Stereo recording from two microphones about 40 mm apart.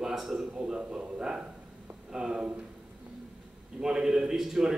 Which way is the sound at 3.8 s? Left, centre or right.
Centre.